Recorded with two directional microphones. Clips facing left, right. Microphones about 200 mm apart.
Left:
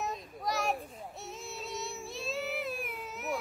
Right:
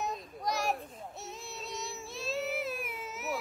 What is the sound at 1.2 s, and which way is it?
Child singing, centre (ahead or behind).